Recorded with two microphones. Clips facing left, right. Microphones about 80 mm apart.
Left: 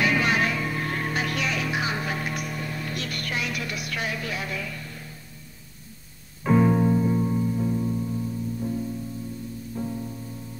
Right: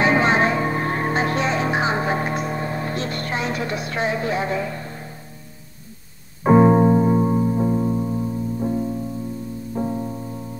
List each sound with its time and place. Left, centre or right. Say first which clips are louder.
0.0 s music: right 6 dB; right
6.4 s music: right 7 dB; right